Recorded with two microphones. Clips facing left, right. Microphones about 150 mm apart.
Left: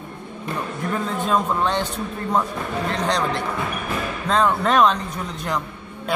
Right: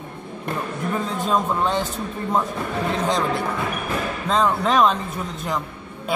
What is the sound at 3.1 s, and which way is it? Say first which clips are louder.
Speech: right 1 dB; 5° right (ahead or behind).